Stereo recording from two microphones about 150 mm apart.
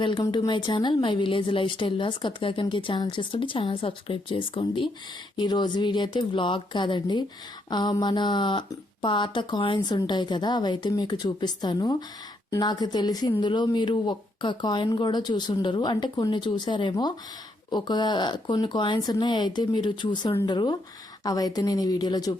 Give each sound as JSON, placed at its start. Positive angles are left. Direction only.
{"t": 0.0, "sound": "speech", "side_deg": 30}